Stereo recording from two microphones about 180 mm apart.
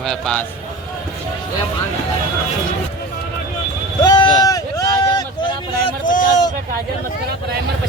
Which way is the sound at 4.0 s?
20° left (ahead or behind).